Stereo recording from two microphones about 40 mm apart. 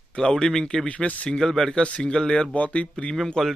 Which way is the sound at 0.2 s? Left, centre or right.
Centre.